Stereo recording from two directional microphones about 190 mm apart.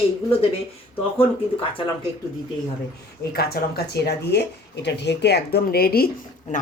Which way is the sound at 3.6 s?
50° left (ahead or behind).